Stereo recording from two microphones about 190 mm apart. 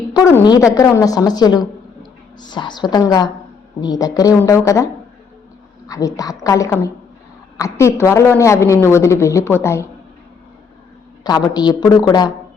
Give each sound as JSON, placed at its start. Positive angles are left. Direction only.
{"t": 0.1, "sound": "a woman's voice", "side_deg": 20}
{"t": 5.9, "sound": "a woman's voice", "side_deg": 20}
{"t": 11.2, "sound": "a woman's voice", "side_deg": 20}